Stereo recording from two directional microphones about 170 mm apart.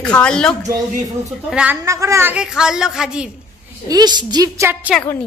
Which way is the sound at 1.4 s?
5° right (ahead or behind).